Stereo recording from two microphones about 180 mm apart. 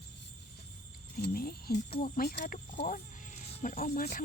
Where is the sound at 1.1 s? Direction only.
55° left (ahead or behind).